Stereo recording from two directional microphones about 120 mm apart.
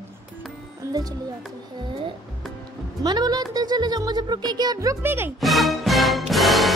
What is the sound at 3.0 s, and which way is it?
Speech, 35° right (ahead or behind).